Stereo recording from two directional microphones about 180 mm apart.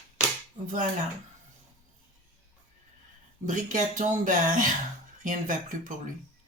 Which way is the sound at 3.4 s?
45° right (ahead or behind).